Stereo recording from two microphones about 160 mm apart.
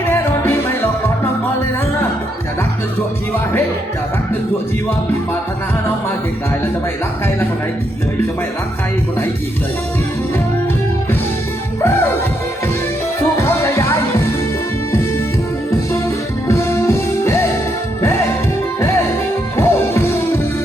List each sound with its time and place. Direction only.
0.1 s music: 15° left (ahead or behind)
13.4 s music: 15° left (ahead or behind)
16.5 s music: 15° left (ahead or behind)
19.5 s music: 15° left (ahead or behind)